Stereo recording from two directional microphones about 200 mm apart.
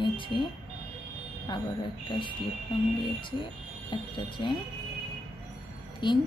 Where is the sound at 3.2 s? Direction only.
25° left (ahead or behind).